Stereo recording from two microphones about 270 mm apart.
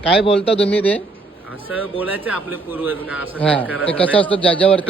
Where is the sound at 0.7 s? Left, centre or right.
Centre.